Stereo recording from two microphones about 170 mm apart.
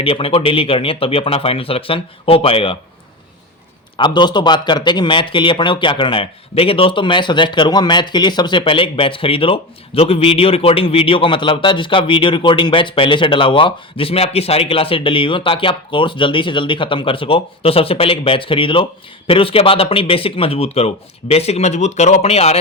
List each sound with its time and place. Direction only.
0.0 s speech: 35° left (ahead or behind)
3.9 s a man's voice: 25° left (ahead or behind)